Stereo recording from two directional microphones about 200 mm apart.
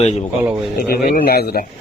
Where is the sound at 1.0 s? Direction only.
50° left (ahead or behind).